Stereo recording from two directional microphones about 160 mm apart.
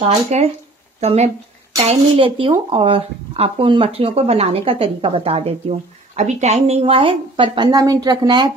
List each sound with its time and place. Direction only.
0.0 s speech: 40° right (ahead or behind); by 8.5 s 25° right (ahead or behind)